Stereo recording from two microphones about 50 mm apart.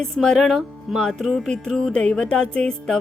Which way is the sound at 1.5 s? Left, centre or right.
Centre.